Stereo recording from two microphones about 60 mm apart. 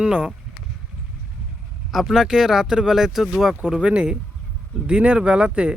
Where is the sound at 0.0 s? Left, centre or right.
Centre.